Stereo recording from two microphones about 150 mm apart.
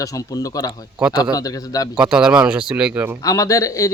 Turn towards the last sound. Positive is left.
turn(degrees=20)  # may be behind; listen again after turning